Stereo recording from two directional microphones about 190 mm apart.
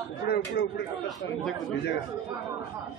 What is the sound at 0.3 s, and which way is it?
Speech, 60° left (ahead or behind).